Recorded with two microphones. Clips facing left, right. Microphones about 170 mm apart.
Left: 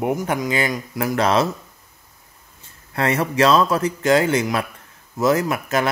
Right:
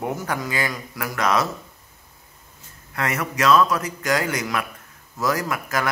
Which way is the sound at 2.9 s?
30° left (ahead or behind).